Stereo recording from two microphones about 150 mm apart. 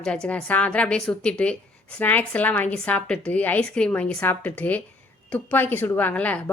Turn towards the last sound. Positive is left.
turn(degrees=10)  # may be behind; listen again after turning